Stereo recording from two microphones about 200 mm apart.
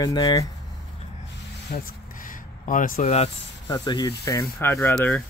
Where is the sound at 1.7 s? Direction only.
45° left (ahead or behind).